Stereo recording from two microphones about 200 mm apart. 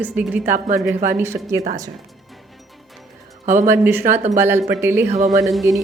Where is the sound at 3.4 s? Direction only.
40° right (ahead or behind).